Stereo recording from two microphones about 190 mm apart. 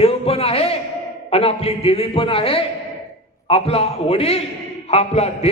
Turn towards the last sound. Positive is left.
turn(degrees=35)  # may be behind; listen again after turning